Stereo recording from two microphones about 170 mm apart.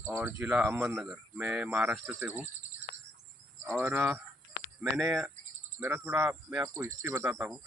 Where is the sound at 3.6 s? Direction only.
10° right (ahead or behind).